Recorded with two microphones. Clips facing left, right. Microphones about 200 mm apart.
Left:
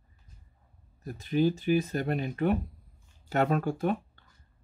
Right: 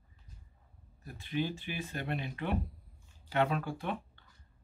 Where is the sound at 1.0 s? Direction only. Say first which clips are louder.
Left 9 dB; 40° left (ahead or behind).